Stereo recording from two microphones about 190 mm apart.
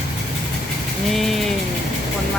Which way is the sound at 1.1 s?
Centre (ahead or behind).